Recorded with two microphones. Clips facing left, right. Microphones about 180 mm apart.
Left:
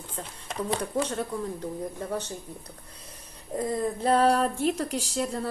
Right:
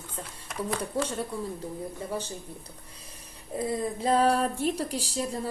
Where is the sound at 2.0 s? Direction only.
10° right (ahead or behind).